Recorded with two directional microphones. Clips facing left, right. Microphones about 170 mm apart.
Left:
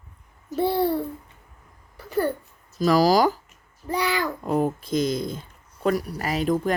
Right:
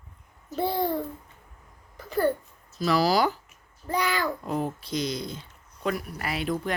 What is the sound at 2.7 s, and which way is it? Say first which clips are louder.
Speech: left 5 dB; 45° left (ahead or behind).